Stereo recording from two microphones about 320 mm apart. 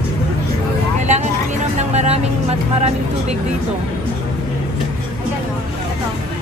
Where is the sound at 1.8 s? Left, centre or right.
Right.